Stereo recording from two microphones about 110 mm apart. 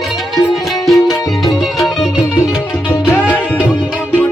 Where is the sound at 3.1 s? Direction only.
15° left (ahead or behind).